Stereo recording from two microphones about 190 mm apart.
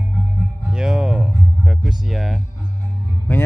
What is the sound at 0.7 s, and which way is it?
Music, 5° right (ahead or behind).